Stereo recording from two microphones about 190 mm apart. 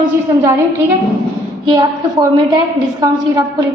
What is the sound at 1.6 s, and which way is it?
A woman's voice, 25° right (ahead or behind).